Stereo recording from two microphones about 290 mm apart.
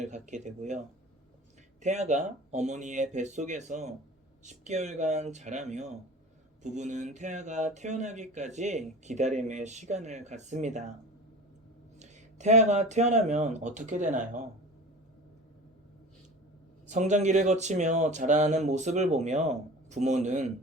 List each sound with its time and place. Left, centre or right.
0.0 s speech: right
11.9 s speech: right
16.9 s speech: right